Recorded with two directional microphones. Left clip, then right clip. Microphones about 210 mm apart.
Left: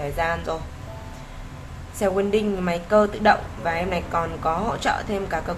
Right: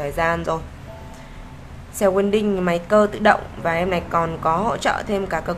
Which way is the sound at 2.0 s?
15° right (ahead or behind).